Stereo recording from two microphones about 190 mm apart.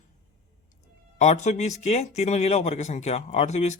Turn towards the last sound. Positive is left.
turn(degrees=35)  # may be behind; listen again after turning